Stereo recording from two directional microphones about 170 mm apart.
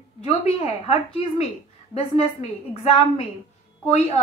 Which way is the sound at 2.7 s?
35° left (ahead or behind).